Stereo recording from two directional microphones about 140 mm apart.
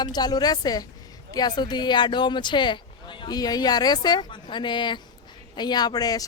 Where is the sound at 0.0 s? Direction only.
30° left (ahead or behind).